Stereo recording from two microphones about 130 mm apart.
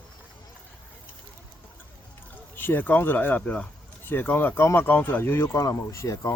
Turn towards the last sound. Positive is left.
turn(degrees=25)  # may be behind; listen again after turning